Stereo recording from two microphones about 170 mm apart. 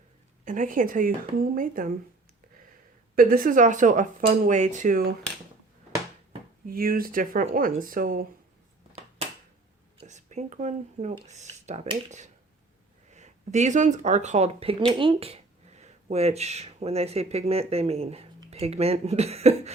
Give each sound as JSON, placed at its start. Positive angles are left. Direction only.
{"t": 0.4, "sound": "speech", "side_deg": -50}
{"t": 3.2, "sound": "speech", "side_deg": -55}
{"t": 6.7, "sound": "speech", "side_deg": -60}
{"t": 9.0, "sound": "a sound", "side_deg": -35}
{"t": 10.0, "sound": "speech", "side_deg": -45}
{"t": 13.1, "sound": "speech", "side_deg": -45}